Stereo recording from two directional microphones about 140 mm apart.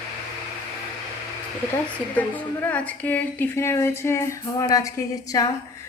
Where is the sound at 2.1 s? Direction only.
10° left (ahead or behind).